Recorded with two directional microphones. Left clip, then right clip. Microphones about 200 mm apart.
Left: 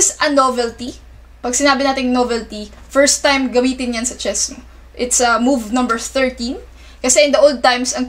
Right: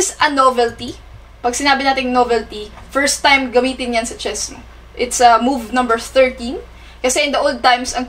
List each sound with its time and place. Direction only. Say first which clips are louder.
0.0 s a woman's voice: right 1 dB; 35° left (ahead or behind)